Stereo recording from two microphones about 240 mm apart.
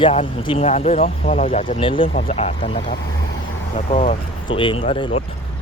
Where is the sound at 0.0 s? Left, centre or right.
Left.